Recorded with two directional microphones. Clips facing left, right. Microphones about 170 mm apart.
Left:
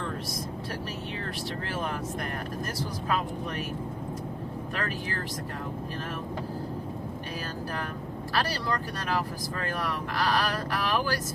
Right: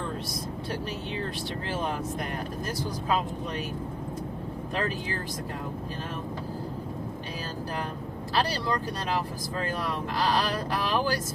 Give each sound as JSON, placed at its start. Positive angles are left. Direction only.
{"t": 4.7, "sound": "speech", "side_deg": -20}
{"t": 8.3, "sound": "speech", "side_deg": -20}